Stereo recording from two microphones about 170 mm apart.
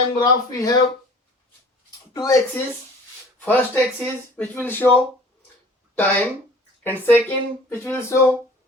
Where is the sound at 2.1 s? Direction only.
20° left (ahead or behind).